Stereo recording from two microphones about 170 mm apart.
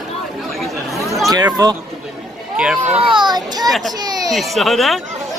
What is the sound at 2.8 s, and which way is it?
Speech, 35° right (ahead or behind).